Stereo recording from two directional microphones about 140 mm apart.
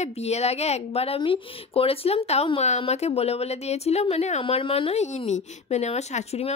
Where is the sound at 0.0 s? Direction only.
50° left (ahead or behind).